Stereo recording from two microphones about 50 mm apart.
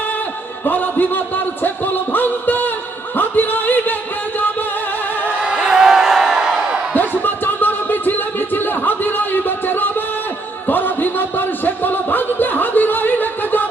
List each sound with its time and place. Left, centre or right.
0.6 s a man's voice: left
1.6 s music: left
5.2 s crowd: centre
6.9 s music: left
10.7 s a sound: left